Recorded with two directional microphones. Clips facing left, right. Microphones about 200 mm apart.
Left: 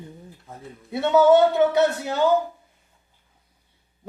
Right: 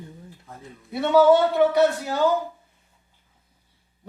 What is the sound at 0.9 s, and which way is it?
Speech, 25° left (ahead or behind).